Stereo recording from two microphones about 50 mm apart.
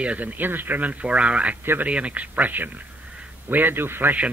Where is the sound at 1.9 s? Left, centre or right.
Right.